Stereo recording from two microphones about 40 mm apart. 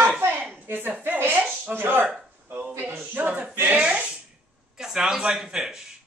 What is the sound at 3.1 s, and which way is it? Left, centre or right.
Speech, right.